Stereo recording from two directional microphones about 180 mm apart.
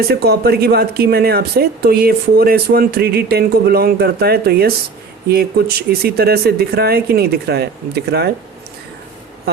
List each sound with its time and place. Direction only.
0.1 s speech: 60° right (ahead or behind)